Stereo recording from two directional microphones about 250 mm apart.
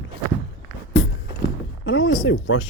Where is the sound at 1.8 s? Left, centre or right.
Left.